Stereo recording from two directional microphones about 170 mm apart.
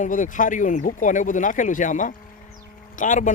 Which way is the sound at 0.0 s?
50° left (ahead or behind).